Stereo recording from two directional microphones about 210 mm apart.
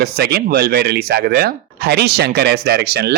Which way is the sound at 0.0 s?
50° right (ahead or behind).